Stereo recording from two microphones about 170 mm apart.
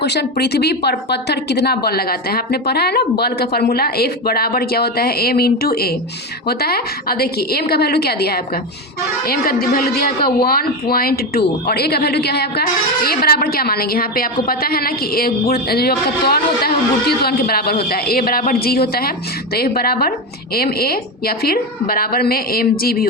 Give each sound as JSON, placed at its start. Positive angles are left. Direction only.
{"t": 0.0, "sound": "speech", "side_deg": 75}